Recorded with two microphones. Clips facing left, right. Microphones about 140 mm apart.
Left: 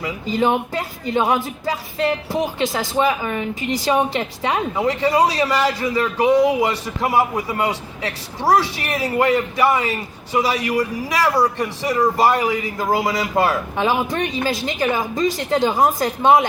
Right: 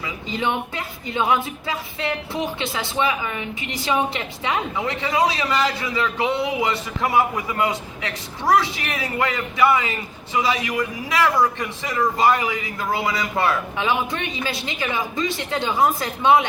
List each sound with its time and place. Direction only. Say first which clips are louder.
0.3 s speech: left 6 dB; 40° left (ahead or behind)